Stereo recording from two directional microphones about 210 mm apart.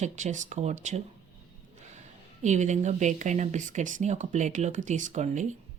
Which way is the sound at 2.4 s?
35° right (ahead or behind).